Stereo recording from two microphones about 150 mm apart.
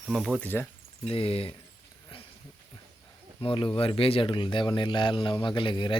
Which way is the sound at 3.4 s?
35° left (ahead or behind).